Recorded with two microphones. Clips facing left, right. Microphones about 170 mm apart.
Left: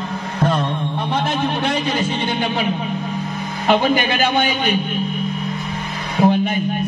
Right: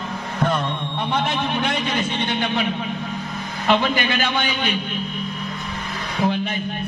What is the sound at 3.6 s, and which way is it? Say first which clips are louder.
A man's voice: left 3 dB; 45° left (ahead or behind).